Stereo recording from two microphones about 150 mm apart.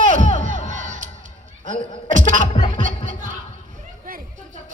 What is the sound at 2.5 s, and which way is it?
Music, 40° left (ahead or behind).